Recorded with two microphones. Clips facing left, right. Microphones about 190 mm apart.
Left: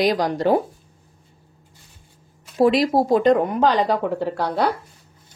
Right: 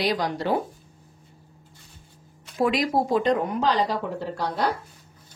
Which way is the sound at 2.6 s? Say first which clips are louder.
Left 6 dB; 30° left (ahead or behind).